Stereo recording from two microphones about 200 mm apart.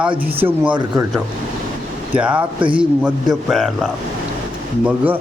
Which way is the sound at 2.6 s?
25° right (ahead or behind).